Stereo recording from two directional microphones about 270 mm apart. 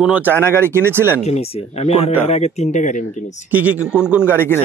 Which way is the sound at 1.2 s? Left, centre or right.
Left.